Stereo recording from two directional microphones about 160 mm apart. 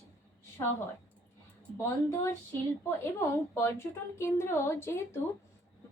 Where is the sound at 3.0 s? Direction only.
15° left (ahead or behind).